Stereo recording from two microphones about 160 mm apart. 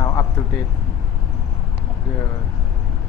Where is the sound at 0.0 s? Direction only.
20° left (ahead or behind).